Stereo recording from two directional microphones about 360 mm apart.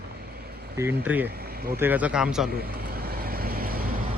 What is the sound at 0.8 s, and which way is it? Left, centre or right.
Speech, centre.